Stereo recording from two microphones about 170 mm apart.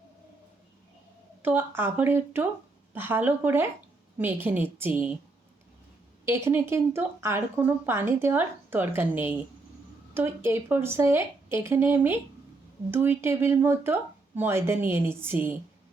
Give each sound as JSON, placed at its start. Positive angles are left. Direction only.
{"t": 1.4, "sound": "speech", "side_deg": -10}
{"t": 6.2, "sound": "speech", "side_deg": -15}